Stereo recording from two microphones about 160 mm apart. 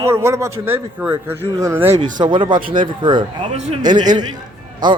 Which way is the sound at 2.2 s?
30° right (ahead or behind).